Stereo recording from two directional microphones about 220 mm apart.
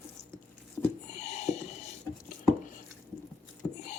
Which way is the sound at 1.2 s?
30° left (ahead or behind).